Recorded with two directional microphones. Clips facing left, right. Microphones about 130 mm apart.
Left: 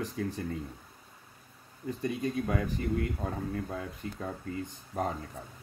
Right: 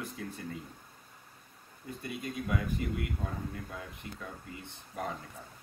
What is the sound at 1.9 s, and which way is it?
Speech, 35° left (ahead or behind).